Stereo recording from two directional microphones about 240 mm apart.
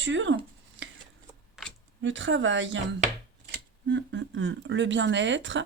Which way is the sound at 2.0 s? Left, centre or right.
Right.